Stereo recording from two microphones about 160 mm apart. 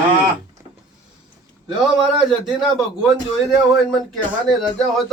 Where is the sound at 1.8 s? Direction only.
5° right (ahead or behind).